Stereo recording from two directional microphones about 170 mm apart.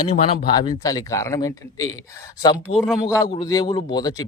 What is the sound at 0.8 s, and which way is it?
A man's voice, 20° left (ahead or behind).